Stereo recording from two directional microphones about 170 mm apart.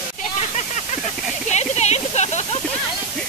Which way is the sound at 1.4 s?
40° left (ahead or behind).